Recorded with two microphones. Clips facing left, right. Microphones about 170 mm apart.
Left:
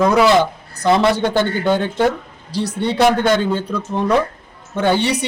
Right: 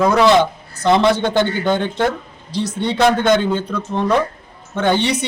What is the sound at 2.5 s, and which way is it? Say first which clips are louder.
Speech: even; 35° left (ahead or behind).